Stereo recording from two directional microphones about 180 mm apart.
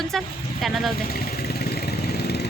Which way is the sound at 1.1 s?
55° left (ahead or behind).